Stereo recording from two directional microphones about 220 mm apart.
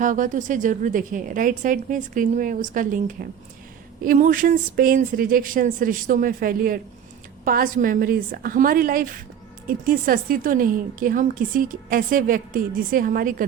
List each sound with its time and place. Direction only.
0.0 s a woman's voice: 35° right (ahead or behind)